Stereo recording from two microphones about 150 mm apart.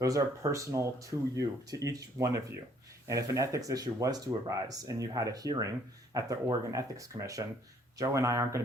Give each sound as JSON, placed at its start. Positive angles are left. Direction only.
{"t": 0.0, "sound": "speech", "side_deg": -20}